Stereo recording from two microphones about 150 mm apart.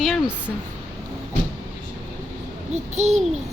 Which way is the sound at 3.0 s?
50° right (ahead or behind).